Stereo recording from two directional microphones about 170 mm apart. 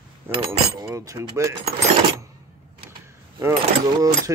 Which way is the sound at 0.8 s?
20° right (ahead or behind).